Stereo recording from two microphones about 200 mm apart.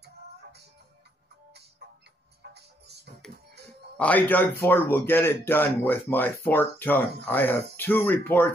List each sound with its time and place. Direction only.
0.0 s music: 55° right (ahead or behind)
2.5 s music: 55° right (ahead or behind)
4.0 s speech: 10° left (ahead or behind)